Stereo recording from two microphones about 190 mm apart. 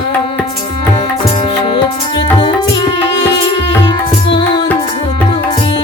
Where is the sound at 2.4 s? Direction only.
25° left (ahead or behind).